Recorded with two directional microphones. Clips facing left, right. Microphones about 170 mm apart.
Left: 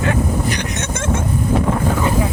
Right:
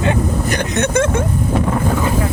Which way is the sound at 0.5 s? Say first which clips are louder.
Right 7 dB; 55° right (ahead or behind).